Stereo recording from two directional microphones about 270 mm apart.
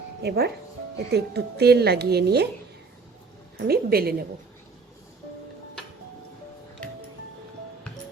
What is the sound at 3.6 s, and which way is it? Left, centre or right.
Speech, right.